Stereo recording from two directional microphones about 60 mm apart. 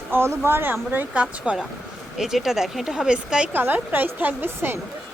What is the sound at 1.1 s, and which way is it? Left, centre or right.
Speech, right.